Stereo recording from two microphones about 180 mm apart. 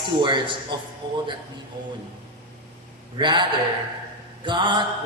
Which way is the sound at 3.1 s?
25° right (ahead or behind).